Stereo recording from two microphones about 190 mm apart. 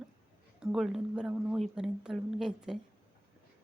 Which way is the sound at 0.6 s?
5° right (ahead or behind).